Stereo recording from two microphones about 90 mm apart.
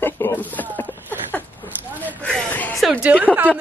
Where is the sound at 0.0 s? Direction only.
20° left (ahead or behind).